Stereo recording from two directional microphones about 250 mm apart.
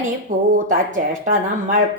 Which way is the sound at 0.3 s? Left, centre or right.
Right.